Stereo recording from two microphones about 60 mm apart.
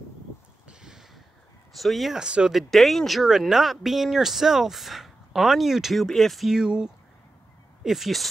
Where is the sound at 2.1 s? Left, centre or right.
Centre.